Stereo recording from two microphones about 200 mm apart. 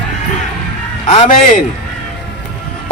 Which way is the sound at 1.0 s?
35° left (ahead or behind).